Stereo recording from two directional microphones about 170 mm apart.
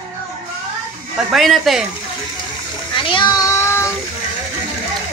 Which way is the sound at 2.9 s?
30° left (ahead or behind).